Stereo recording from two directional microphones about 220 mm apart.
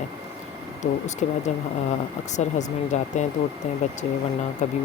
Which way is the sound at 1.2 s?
30° left (ahead or behind).